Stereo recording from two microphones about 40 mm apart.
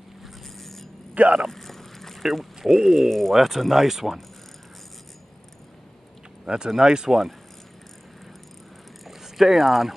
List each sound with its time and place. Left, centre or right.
0.6 s a sound: centre
1.2 s speech: right
1.5 s vehicle: centre
2.2 s speech: centre
6.4 s speech: centre
9.0 s a sound: centre